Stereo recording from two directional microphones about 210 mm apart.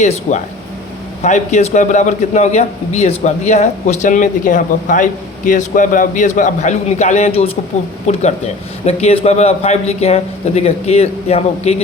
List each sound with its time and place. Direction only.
0.0 s a man's voice: 35° left (ahead or behind)